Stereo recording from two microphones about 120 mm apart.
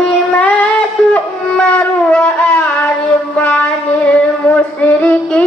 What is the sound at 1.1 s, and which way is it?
Wind instrument, 10° left (ahead or behind).